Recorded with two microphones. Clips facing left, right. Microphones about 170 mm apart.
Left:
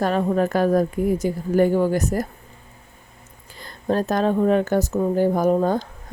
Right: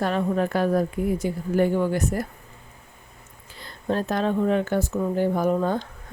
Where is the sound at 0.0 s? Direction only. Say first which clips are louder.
Left 3 dB; 40° left (ahead or behind).